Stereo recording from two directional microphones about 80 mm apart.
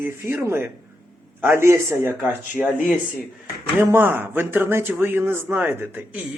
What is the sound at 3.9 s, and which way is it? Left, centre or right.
Speech, right.